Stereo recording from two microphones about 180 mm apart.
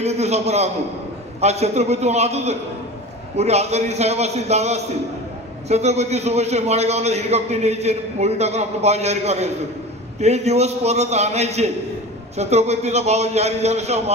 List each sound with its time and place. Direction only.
0.0 s a man's voice: 35° right (ahead or behind)